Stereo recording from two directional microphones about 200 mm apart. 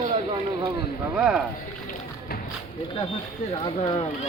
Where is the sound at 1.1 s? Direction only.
5° right (ahead or behind).